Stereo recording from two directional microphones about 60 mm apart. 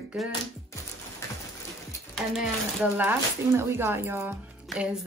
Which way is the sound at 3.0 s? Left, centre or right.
Right.